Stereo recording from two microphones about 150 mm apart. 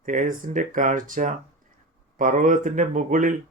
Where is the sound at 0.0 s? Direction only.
60° right (ahead or behind).